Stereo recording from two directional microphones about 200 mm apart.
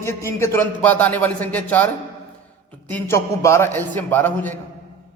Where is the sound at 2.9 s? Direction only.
15° left (ahead or behind).